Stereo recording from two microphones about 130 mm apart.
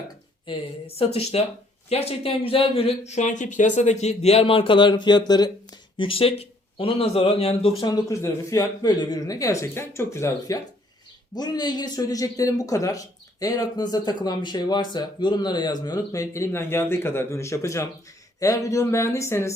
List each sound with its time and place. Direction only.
0.4 s speech: 50° left (ahead or behind)
3.1 s speech: 65° left (ahead or behind); by 5.5 s 30° left (ahead or behind)
6.0 s speech: 45° left (ahead or behind)
7.9 s a man's voice: 30° left (ahead or behind)